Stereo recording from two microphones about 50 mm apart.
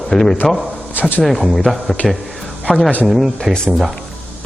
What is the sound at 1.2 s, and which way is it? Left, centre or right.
Speech, centre.